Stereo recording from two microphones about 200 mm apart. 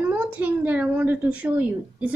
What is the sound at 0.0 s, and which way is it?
A woman's voice, 5° right (ahead or behind).